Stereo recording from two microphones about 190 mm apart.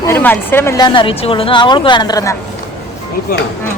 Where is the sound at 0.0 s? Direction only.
10° left (ahead or behind).